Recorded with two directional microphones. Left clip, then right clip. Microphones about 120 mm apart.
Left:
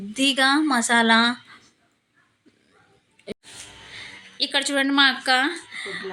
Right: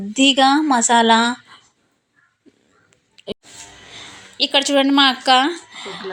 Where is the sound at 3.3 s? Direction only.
25° right (ahead or behind).